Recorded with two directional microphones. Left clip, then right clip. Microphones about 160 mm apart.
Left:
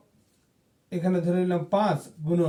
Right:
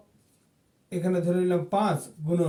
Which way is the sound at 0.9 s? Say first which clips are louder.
Even; 20° right (ahead or behind).